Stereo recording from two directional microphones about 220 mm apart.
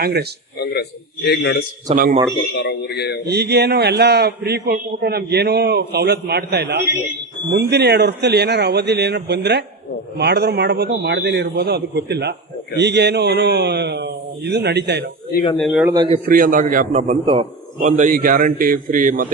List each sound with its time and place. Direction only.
0.0 s a man's voice: 45° right (ahead or behind)
0.6 s a sound: 50° left (ahead or behind)
1.9 s a man's voice: 40° right (ahead or behind)
2.5 s a man's voice: 50° left (ahead or behind)
3.2 s a man's voice: 45° right (ahead or behind)
15.5 s a man's voice: centre (ahead or behind)
16.0 s a man's voice: 35° right (ahead or behind)